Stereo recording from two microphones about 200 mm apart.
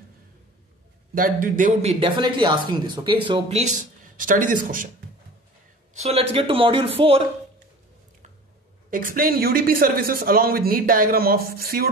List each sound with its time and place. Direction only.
1.1 s speech: 45° right (ahead or behind)
5.9 s speech: 30° right (ahead or behind)
8.9 s a man's voice: 45° right (ahead or behind)